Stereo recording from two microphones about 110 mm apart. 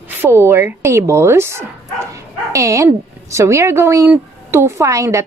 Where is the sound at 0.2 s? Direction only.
20° right (ahead or behind).